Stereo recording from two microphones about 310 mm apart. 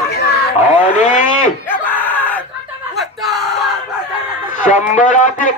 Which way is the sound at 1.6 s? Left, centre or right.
Centre.